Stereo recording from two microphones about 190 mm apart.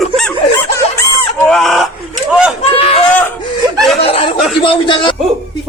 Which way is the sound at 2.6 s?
30° left (ahead or behind).